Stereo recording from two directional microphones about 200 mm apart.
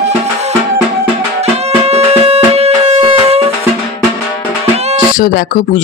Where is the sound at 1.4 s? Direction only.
30° right (ahead or behind).